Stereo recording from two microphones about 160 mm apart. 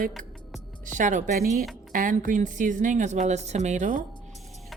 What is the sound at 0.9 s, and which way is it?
A woman's voice, 50° right (ahead or behind).